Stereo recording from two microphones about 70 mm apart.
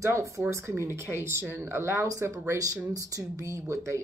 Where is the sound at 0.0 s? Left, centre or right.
Right.